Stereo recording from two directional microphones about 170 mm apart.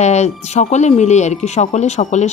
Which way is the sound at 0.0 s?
40° left (ahead or behind).